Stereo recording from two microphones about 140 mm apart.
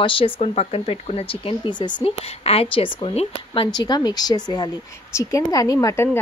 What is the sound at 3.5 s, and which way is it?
Speech, 30° left (ahead or behind).